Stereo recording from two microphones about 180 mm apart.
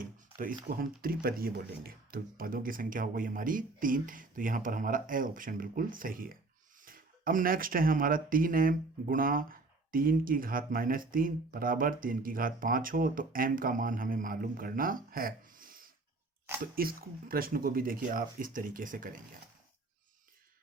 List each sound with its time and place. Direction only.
0.0 s speech: 50° right (ahead or behind)